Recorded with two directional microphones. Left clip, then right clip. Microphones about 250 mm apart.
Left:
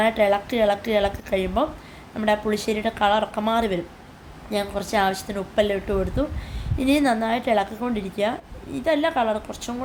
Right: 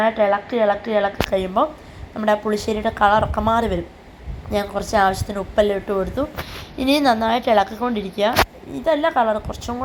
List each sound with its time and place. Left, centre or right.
0.0 s a woman's voice: centre